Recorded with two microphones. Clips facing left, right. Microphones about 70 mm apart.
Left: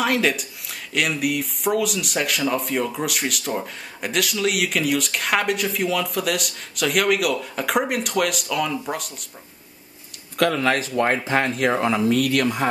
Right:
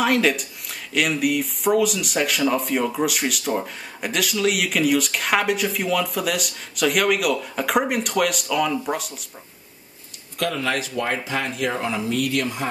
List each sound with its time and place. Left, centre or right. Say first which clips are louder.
0.0 s speech: right 1 dB; centre
10.3 s speech: left 4 dB; left